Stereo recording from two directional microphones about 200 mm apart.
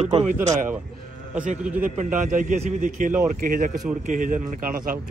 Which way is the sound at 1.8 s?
40° right (ahead or behind).